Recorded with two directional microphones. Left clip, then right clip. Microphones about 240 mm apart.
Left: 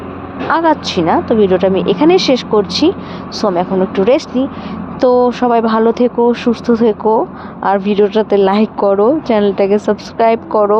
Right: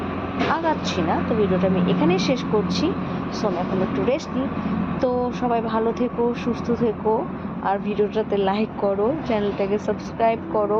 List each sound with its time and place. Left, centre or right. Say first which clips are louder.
0.5 s speech: left 13 dB; left